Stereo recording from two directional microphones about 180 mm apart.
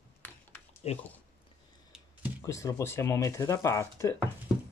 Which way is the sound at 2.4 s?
15° left (ahead or behind).